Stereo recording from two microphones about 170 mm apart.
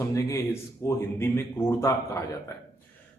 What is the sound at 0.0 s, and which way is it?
A man's voice, 15° left (ahead or behind).